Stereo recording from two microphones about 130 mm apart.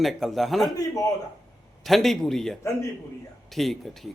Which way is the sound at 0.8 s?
25° left (ahead or behind).